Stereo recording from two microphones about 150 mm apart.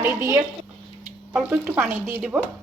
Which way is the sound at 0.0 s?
20° right (ahead or behind).